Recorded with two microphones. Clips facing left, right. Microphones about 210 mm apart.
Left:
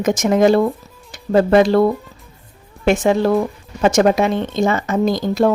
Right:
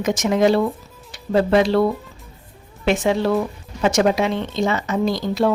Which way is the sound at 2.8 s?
45° left (ahead or behind).